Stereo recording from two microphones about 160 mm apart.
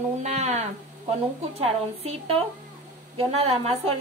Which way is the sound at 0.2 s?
45° right (ahead or behind).